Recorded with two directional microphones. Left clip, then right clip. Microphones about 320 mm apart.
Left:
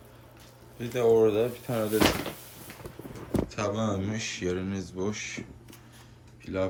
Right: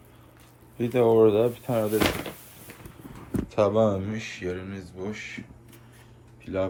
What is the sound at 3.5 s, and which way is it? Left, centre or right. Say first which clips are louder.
Speech: right 13 dB; centre.